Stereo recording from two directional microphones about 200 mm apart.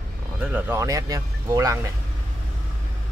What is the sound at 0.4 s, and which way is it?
Speech, 10° right (ahead or behind).